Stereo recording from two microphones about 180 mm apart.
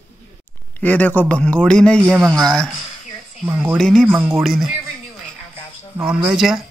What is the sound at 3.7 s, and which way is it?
Speech, 5° left (ahead or behind).